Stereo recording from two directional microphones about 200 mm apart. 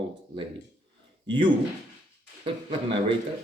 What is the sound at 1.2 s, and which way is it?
Speech, 25° right (ahead or behind).